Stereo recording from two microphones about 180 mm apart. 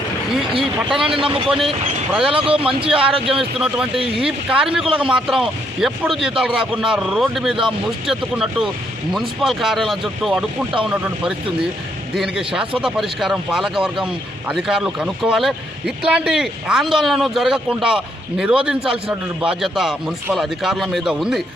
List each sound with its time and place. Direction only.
0.9 s speech: 30° right (ahead or behind)
3.3 s speech: 5° right (ahead or behind)